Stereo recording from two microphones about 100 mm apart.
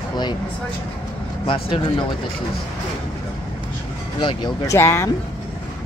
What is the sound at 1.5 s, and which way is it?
Speech, 55° left (ahead or behind).